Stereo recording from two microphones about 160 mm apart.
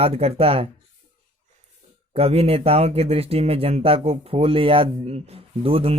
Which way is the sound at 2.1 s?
40° right (ahead or behind).